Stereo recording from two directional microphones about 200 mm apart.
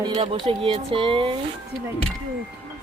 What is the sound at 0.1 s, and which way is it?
Speech, 25° right (ahead or behind).